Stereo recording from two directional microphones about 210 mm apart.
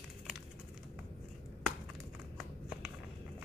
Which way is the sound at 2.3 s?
5° right (ahead or behind).